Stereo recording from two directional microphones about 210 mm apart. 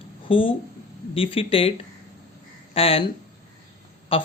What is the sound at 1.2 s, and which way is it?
Speech, 25° left (ahead or behind).